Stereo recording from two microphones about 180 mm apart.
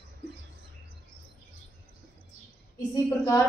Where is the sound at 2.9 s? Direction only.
20° left (ahead or behind).